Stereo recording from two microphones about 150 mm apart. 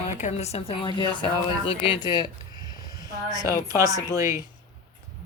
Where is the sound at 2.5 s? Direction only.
25° right (ahead or behind).